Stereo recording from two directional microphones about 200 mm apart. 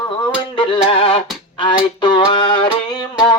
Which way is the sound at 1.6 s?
25° left (ahead or behind).